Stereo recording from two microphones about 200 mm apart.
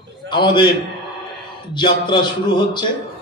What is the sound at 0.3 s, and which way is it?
A man's voice, 25° left (ahead or behind).